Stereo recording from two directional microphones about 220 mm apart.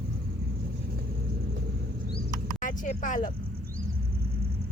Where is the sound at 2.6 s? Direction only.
35° left (ahead or behind).